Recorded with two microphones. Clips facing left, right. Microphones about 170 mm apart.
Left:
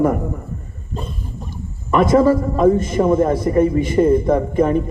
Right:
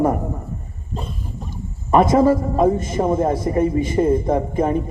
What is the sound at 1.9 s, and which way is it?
Speech, 25° right (ahead or behind).